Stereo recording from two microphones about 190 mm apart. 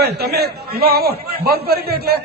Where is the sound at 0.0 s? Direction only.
55° right (ahead or behind).